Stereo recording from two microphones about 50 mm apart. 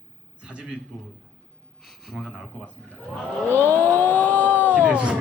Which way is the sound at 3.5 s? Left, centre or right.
Left.